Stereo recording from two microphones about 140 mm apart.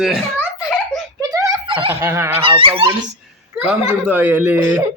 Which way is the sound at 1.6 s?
35° right (ahead or behind).